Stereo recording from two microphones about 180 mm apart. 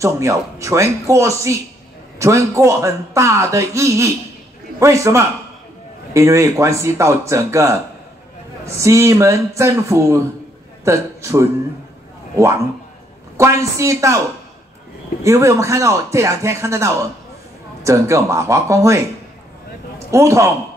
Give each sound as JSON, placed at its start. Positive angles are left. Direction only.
{"t": 0.0, "sound": "speech", "side_deg": -15}
{"t": 8.7, "sound": "a man's voice", "side_deg": -15}
{"t": 15.2, "sound": "speech", "side_deg": -15}
{"t": 20.1, "sound": "speech", "side_deg": -15}